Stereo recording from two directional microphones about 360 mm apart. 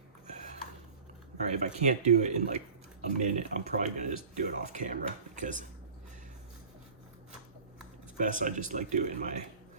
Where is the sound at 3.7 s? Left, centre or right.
Right.